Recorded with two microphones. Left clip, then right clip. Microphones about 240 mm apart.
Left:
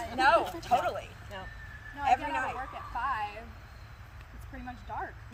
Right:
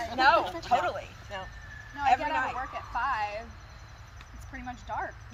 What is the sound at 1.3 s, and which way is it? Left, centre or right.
Vehicle, centre.